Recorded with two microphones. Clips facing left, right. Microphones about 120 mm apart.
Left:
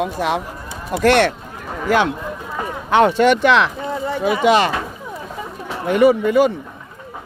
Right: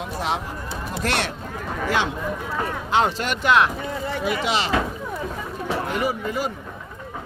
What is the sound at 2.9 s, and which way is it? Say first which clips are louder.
Speech: left 10 dB; 60° left (ahead or behind).